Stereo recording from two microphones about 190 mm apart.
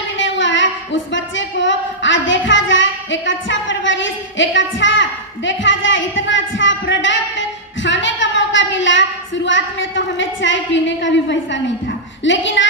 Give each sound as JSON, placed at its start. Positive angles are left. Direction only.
{"t": 0.2, "sound": "a woman's voice", "side_deg": 75}